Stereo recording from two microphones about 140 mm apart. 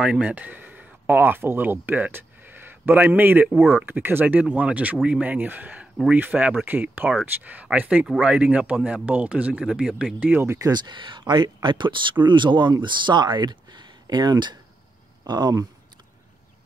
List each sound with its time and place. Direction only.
0.0 s speech: 10° right (ahead or behind)
10.7 s speech: 35° right (ahead or behind)